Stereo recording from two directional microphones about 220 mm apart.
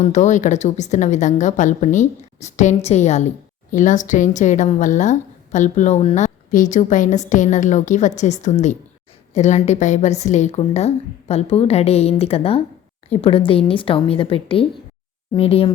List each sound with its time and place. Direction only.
0.0 s a woman's voice: 35° left (ahead or behind)